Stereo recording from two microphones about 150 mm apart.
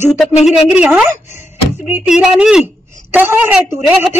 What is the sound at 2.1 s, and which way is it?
A woman's voice, 5° right (ahead or behind).